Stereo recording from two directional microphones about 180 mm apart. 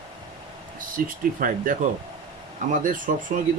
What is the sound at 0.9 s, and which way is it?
Speech, 50° right (ahead or behind).